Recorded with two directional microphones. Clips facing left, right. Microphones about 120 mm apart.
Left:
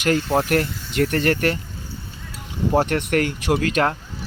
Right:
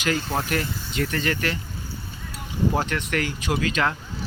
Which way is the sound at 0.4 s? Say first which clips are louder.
Left 6 dB; 60° left (ahead or behind).